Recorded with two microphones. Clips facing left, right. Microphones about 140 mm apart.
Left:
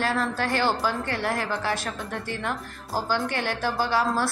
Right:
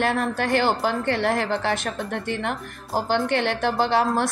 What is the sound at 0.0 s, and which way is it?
Speech, 55° right (ahead or behind).